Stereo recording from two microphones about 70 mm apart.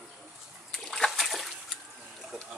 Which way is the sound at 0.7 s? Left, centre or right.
Centre.